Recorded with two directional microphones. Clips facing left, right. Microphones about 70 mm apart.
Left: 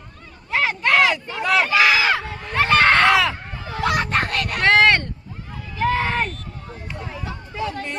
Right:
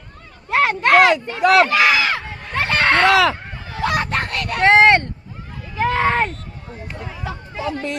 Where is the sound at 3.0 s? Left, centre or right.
Right.